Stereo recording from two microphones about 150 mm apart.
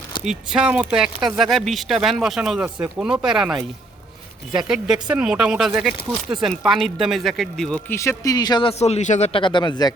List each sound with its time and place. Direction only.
0.3 s speech: 5° right (ahead or behind)
7.9 s speech: 20° left (ahead or behind)
8.8 s a man's voice: 50° left (ahead or behind)
9.3 s speech: 30° left (ahead or behind)